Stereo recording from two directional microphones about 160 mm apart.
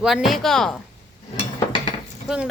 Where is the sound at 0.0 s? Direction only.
Centre (ahead or behind).